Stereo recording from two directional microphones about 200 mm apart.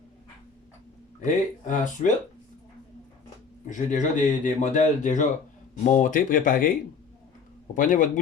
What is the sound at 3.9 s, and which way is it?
Speech, 40° left (ahead or behind).